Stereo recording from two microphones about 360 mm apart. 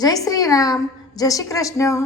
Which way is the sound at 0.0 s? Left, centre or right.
Centre.